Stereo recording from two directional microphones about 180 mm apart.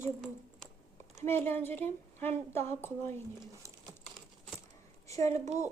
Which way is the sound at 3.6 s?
15° right (ahead or behind).